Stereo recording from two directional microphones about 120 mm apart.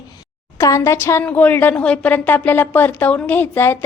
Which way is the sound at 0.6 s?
25° left (ahead or behind).